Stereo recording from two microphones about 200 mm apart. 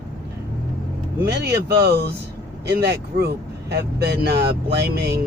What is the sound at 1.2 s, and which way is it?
Speech, 55° right (ahead or behind).